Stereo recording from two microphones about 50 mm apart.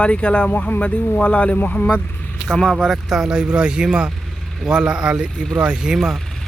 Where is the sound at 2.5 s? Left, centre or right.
Centre.